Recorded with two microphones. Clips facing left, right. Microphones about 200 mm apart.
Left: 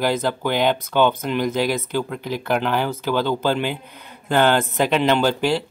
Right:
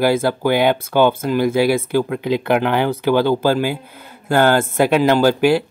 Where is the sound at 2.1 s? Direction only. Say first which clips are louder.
Right 6 dB; 70° right (ahead or behind).